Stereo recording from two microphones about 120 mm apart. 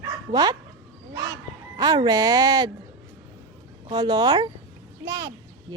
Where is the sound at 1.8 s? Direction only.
35° right (ahead or behind).